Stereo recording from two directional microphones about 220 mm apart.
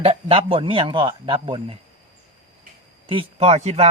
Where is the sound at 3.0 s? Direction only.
25° right (ahead or behind).